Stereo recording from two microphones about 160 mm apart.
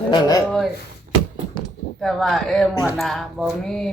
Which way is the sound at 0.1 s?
25° left (ahead or behind).